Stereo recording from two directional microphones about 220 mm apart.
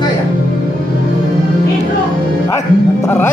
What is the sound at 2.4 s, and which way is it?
Music, 15° left (ahead or behind).